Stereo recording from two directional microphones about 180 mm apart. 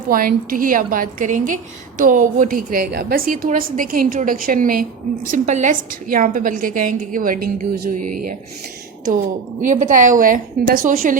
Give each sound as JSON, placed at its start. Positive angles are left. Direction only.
{"t": 0.1, "sound": "a woman's voice", "side_deg": -50}
{"t": 9.6, "sound": "a woman's voice", "side_deg": -45}